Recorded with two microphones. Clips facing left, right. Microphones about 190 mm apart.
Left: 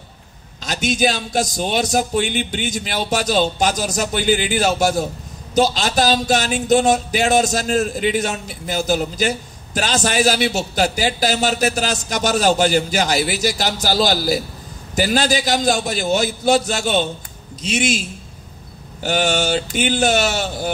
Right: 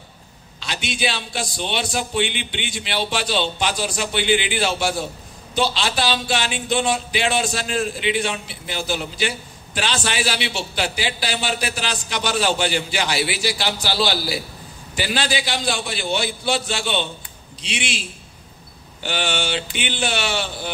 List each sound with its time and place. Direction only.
0.6 s speech: 45° left (ahead or behind)
19.0 s speech: 45° left (ahead or behind)